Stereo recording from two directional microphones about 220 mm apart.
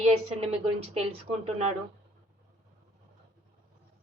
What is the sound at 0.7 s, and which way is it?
Speech, 25° right (ahead or behind).